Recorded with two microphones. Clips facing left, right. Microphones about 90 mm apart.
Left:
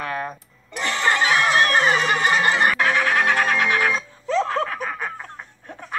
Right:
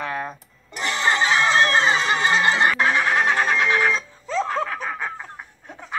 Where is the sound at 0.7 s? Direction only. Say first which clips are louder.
Even; 20° right (ahead or behind).